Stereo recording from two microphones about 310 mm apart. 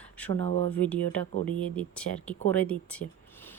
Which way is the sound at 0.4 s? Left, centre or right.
Left.